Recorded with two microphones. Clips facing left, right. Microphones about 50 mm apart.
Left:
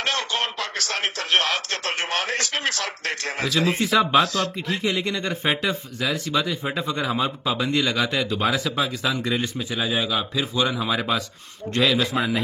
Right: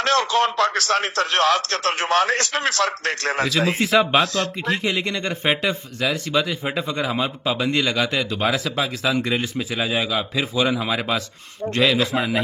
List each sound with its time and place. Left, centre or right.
0.0 s a man's voice: right
4.1 s speech: right
4.8 s speech: centre
9.8 s speech: right
10.3 s speech: centre